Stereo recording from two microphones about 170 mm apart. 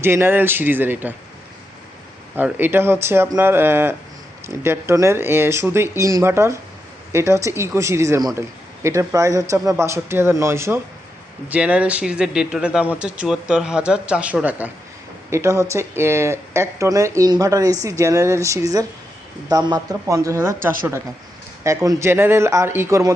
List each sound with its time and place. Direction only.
0.0 s speech: 15° right (ahead or behind)
2.3 s speech: 10° right (ahead or behind)